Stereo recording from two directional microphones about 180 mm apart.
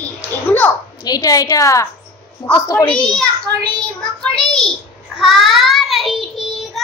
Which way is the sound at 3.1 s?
5° left (ahead or behind).